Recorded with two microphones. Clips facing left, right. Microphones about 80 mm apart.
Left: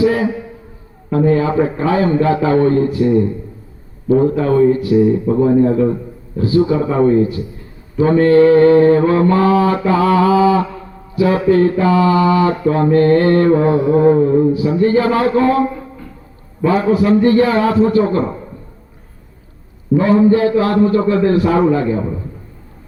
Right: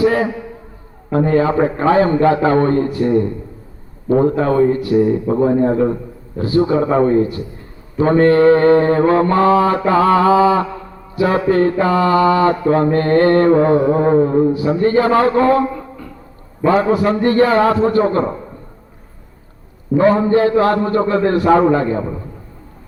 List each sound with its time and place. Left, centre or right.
0.0 s a man's voice: right
1.1 s mantra: right
16.6 s mantra: right
20.0 s mantra: right